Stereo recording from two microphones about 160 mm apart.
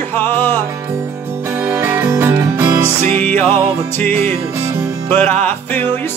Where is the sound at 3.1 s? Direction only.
10° left (ahead or behind).